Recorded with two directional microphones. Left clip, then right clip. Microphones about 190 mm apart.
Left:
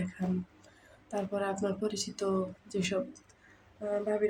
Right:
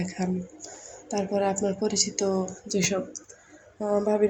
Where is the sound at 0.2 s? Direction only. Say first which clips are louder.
Right 7 dB; 20° right (ahead or behind).